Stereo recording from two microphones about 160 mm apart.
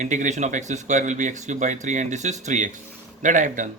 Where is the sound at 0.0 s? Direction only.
50° right (ahead or behind).